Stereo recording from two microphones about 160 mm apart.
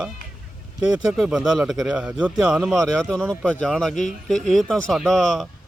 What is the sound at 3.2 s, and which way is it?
A man's voice, 10° right (ahead or behind).